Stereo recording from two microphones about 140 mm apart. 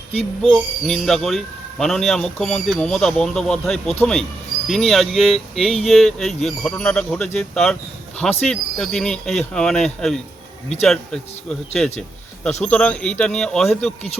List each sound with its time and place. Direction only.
0.4 s speech: centre (ahead or behind)
12.5 s a man's voice: 55° left (ahead or behind)
12.7 s speech: 10° left (ahead or behind)